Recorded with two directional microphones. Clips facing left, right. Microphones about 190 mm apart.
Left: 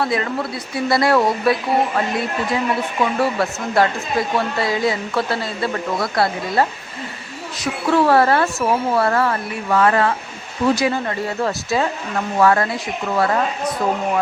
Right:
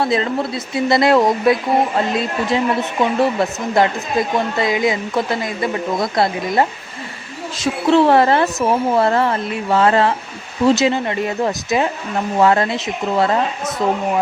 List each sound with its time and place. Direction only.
0.0 s speech: 25° right (ahead or behind)
3.0 s speech: 20° right (ahead or behind)